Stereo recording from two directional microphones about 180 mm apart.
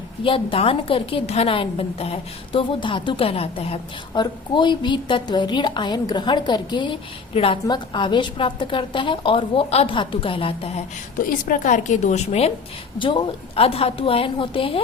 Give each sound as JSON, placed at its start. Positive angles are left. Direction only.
{"t": 0.3, "sound": "a woman's voice", "side_deg": 30}
{"t": 11.3, "sound": "a woman's voice", "side_deg": 50}